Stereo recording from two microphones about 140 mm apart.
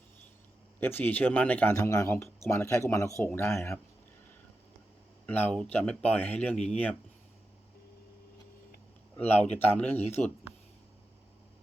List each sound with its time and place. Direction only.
0.8 s speech: 15° left (ahead or behind)
5.2 s speech: 10° left (ahead or behind)
9.1 s speech: 10° left (ahead or behind)